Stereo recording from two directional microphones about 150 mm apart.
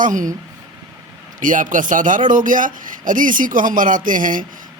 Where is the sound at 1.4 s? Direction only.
60° right (ahead or behind).